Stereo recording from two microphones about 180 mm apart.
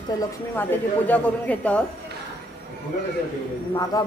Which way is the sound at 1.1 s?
10° left (ahead or behind).